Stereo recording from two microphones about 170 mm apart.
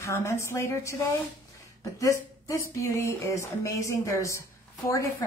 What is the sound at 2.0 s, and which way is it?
Speech, 20° left (ahead or behind).